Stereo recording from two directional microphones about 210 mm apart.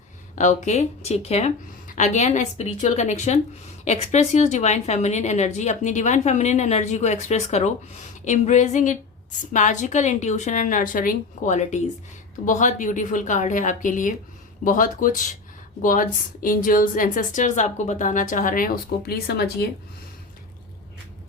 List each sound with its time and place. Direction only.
0.3 s a woman's voice: 35° left (ahead or behind)